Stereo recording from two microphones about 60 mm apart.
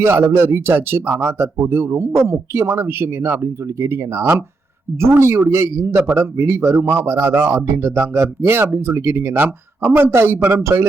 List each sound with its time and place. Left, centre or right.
0.0 s a man's voice: right